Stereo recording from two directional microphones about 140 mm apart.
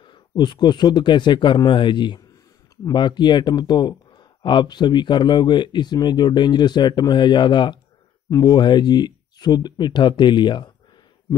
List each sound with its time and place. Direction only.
0.0 s speech: 30° left (ahead or behind)